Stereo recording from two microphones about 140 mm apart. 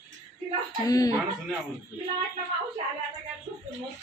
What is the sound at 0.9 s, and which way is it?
Speech, 25° left (ahead or behind).